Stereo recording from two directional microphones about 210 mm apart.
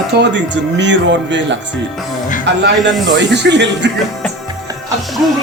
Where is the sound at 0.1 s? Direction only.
55° right (ahead or behind).